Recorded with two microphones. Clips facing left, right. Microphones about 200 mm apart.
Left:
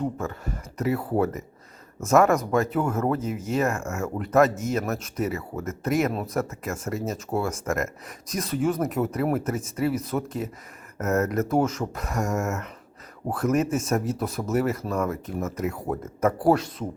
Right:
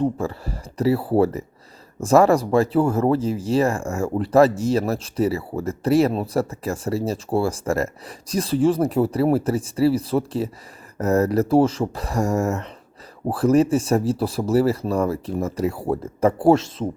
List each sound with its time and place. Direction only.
0.0 s speech: 30° right (ahead or behind)